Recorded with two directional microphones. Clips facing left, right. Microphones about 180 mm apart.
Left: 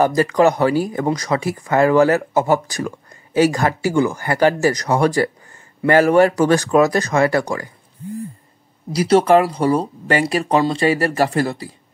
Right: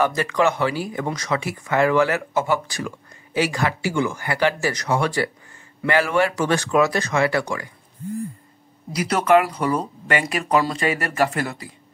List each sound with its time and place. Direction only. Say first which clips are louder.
0.0 s speech: left 5 dB; 35° left (ahead or behind)
8.9 s speech: left 4 dB; 30° left (ahead or behind)